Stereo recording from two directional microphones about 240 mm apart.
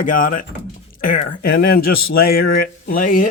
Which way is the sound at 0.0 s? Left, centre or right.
Left.